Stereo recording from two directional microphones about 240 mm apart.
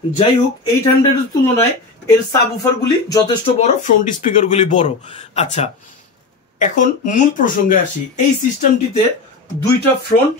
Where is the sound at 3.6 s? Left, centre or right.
Left.